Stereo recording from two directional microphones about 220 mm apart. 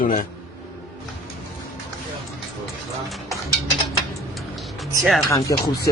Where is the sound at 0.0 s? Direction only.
35° left (ahead or behind).